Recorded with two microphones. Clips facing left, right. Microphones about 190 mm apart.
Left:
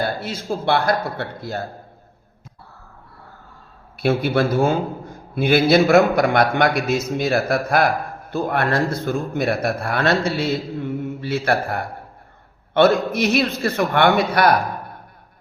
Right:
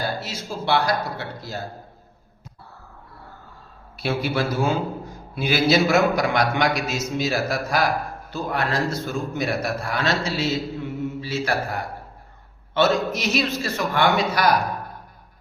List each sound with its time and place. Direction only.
0.0 s a man's voice: 55° left (ahead or behind)
3.9 s a man's voice: 55° left (ahead or behind)